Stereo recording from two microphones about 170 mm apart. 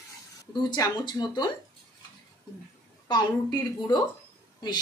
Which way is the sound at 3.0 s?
25° left (ahead or behind).